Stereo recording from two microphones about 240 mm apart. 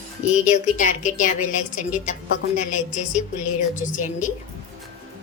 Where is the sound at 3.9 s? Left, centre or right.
Left.